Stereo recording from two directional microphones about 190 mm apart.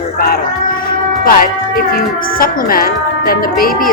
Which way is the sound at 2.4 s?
50° left (ahead or behind).